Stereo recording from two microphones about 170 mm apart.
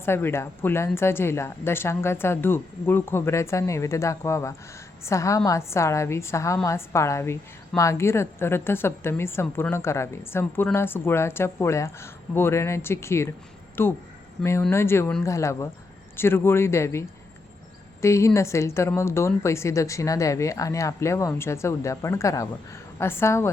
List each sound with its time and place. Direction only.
0.0 s a woman's voice: 15° left (ahead or behind)
18.0 s a woman's voice: 15° left (ahead or behind)